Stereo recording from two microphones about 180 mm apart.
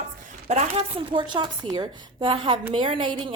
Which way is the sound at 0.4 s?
35° right (ahead or behind).